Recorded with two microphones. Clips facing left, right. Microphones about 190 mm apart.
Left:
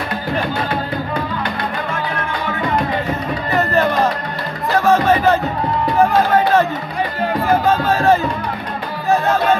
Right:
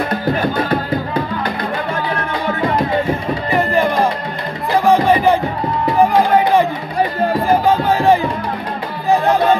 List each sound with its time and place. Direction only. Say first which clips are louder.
3.1 s music: right 2 dB; 10° right (ahead or behind)